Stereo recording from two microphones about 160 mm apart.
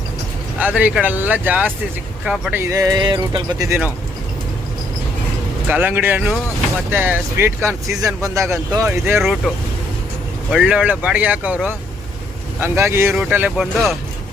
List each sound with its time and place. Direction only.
0.6 s speech: 10° right (ahead or behind)
2.6 s speech: 20° right (ahead or behind)
5.6 s speech: 10° right (ahead or behind)
10.5 s speech: 5° right (ahead or behind)